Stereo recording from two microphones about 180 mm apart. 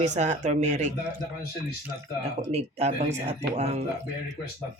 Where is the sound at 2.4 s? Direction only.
35° right (ahead or behind).